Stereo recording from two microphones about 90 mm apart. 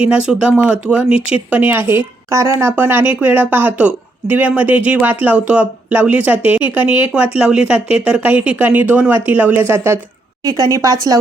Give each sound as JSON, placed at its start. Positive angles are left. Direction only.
{"t": 0.0, "sound": "a woman's voice", "side_deg": -10}